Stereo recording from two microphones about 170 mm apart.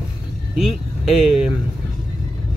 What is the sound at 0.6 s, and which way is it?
Speech, centre (ahead or behind).